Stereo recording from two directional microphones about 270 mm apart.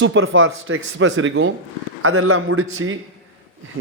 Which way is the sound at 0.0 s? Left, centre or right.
Right.